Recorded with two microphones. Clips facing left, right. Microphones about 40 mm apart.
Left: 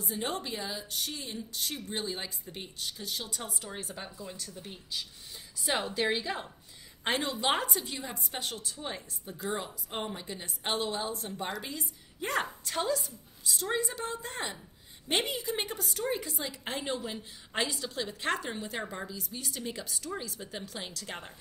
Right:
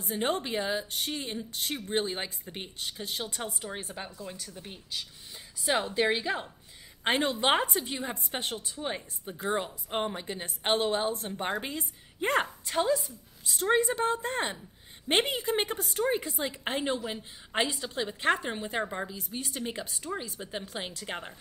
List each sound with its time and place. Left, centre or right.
0.0 s a woman's voice: right
4.0 s a woman's voice: centre
5.7 s a woman's voice: centre
7.1 s a woman's voice: right
12.6 s a woman's voice: centre
13.5 s a woman's voice: right
16.8 s a woman's voice: centre
19.1 s a woman's voice: right